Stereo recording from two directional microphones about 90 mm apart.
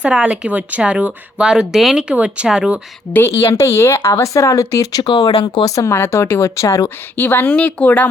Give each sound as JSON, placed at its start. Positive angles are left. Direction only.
{"t": 0.0, "sound": "speech", "side_deg": -10}
{"t": 3.1, "sound": "speech", "side_deg": 25}
{"t": 5.0, "sound": "speech", "side_deg": 60}
{"t": 5.6, "sound": "speech", "side_deg": 35}